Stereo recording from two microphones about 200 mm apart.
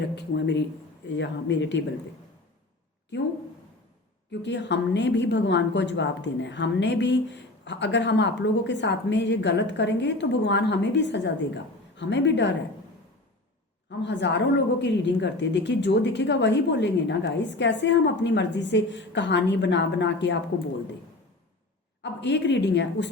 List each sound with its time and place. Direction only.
0.2 s a woman's voice: 60° left (ahead or behind)
4.3 s a woman's voice: 60° left (ahead or behind)
14.0 s a woman's voice: 60° left (ahead or behind)
22.0 s a woman's voice: 60° left (ahead or behind)